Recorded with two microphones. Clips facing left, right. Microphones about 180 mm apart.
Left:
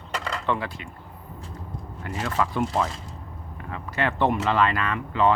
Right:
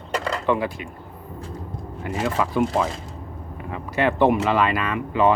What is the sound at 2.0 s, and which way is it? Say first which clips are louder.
Speech: right 3 dB; 15° right (ahead or behind).